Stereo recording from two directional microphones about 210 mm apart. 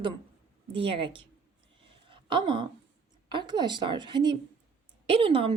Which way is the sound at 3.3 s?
20° right (ahead or behind).